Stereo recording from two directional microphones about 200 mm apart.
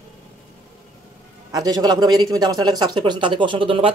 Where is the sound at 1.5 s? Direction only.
20° right (ahead or behind).